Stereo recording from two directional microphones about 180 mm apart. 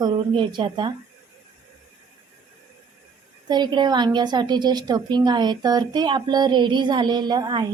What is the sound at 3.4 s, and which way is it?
A woman's voice, 25° right (ahead or behind).